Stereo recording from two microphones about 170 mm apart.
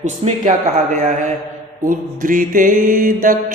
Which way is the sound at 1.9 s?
55° right (ahead or behind).